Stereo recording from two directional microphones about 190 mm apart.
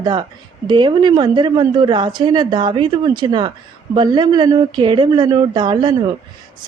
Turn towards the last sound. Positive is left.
turn(degrees=-25)  # may be behind; listen again after turning